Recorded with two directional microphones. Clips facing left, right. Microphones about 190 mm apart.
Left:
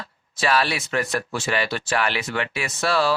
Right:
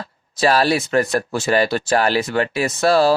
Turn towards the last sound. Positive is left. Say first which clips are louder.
# right 7 dB
turn(degrees=-40)  # may be behind; listen again after turning